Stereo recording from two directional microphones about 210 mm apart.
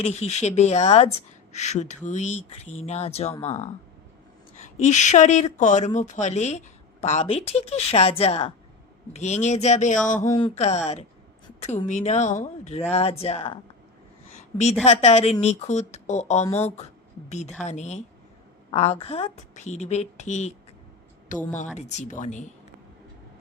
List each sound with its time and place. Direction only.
0.0 s speech: 30° left (ahead or behind)
4.8 s speech: 35° left (ahead or behind)
10.2 s speech: 25° left (ahead or behind)
14.8 s speech: 30° left (ahead or behind)